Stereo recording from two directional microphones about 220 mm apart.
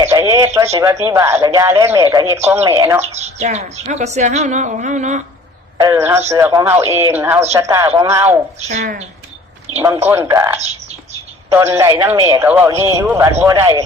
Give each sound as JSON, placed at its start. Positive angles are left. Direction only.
{"t": 0.0, "sound": "a man's voice", "side_deg": -10}
{"t": 3.0, "sound": "speech", "side_deg": -30}
{"t": 5.7, "sound": "a man's voice", "side_deg": -15}
{"t": 8.8, "sound": "speech", "side_deg": -40}
{"t": 10.1, "sound": "a man's voice", "side_deg": -10}